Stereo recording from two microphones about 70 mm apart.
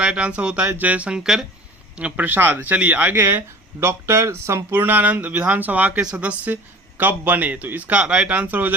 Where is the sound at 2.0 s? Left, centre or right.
Right.